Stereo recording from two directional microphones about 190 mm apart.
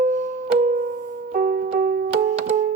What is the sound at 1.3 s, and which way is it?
Music, 50° right (ahead or behind).